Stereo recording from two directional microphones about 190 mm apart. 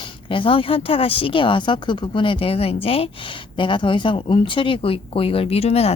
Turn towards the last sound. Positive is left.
turn(degrees=35)  # may be behind; listen again after turning